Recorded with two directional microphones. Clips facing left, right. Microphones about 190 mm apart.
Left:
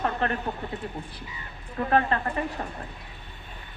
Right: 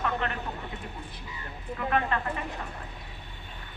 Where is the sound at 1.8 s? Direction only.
35° left (ahead or behind).